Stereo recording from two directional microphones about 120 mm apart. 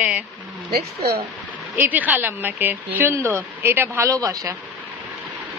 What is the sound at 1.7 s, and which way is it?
Speech, 15° right (ahead or behind).